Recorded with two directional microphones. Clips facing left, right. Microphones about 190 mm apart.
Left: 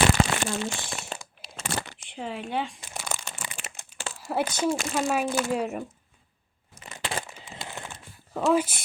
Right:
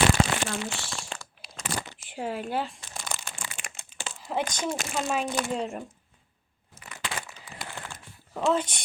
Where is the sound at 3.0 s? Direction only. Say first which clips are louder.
Left 2 dB; 5° left (ahead or behind).